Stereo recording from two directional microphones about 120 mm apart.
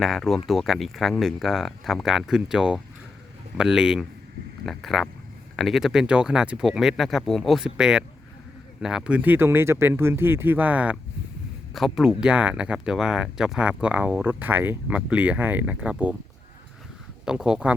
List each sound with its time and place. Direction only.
0.0 s speech: centre (ahead or behind); by 10.9 s 15° right (ahead or behind)
11.7 s speech: centre (ahead or behind)
17.2 s speech: 5° right (ahead or behind)